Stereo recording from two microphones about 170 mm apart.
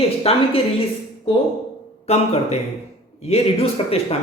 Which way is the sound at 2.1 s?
40° left (ahead or behind).